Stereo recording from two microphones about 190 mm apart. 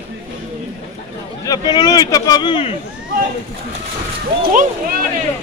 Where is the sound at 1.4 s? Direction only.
20° left (ahead or behind).